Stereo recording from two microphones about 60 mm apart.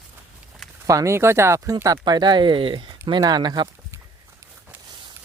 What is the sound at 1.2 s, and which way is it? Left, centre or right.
Speech, right.